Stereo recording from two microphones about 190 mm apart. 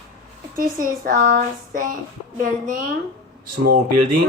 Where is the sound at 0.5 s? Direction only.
45° right (ahead or behind).